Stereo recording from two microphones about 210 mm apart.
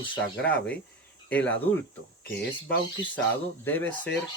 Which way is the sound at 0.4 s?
5° left (ahead or behind).